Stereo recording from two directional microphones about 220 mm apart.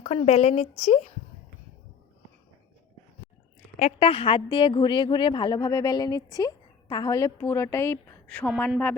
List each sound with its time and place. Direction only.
0.0 s a woman's voice: 30° left (ahead or behind)
3.8 s a woman's voice: 30° left (ahead or behind); by 8.7 s 5° left (ahead or behind)